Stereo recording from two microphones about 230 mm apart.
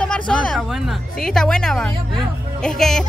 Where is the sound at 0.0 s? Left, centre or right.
Centre.